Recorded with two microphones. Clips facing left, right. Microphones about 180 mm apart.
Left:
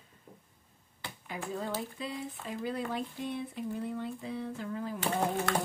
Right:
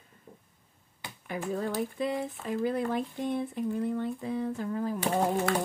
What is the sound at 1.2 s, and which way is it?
Speech, 55° right (ahead or behind).